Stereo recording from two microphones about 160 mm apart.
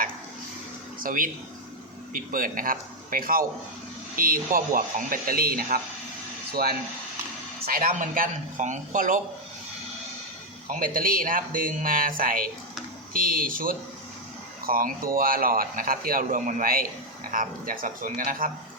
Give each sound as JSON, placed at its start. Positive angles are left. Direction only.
{"t": 0.9, "sound": "a man's voice", "side_deg": -60}
{"t": 10.7, "sound": "a man's voice", "side_deg": -60}